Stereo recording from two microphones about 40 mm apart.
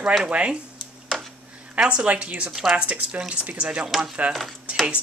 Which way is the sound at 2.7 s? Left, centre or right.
Right.